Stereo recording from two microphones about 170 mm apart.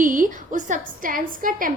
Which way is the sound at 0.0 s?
50° right (ahead or behind).